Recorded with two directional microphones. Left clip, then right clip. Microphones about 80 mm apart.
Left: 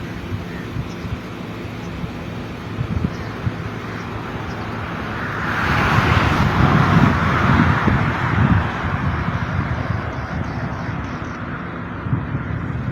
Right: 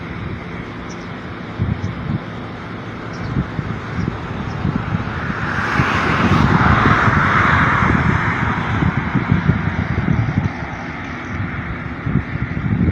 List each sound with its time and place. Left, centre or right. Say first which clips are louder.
5.5 s vehicle: even; centre
6.2 s vehicle: right 3 dB; centre
8.9 s vehicle: right 3 dB; centre